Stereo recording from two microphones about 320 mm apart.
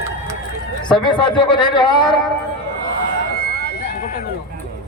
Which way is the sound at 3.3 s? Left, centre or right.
Left.